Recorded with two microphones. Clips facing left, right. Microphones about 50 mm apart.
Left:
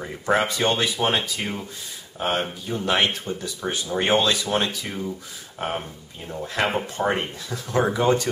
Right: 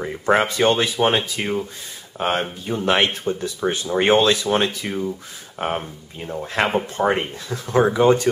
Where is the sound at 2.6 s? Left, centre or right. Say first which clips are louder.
Right 4 dB; right.